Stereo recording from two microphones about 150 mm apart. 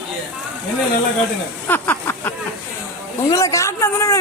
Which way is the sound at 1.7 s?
15° left (ahead or behind).